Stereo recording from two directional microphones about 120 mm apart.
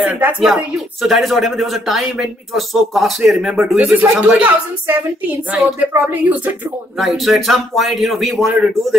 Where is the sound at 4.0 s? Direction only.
15° right (ahead or behind).